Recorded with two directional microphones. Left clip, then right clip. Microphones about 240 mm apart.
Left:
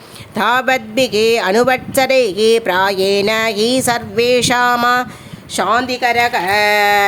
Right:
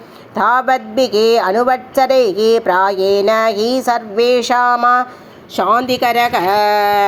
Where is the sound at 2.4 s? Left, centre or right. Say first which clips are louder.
Right 1 dB; left.